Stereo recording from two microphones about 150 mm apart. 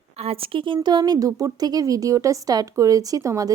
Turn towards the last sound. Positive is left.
turn(degrees=-20)  # may be behind; listen again after turning